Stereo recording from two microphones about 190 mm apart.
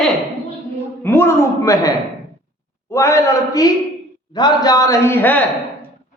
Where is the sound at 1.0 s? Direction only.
10° left (ahead or behind).